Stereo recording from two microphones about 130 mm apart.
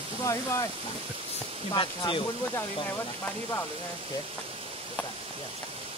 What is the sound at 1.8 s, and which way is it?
Speech, 40° left (ahead or behind).